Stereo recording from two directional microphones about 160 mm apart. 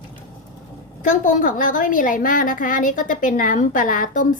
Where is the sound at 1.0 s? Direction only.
55° left (ahead or behind).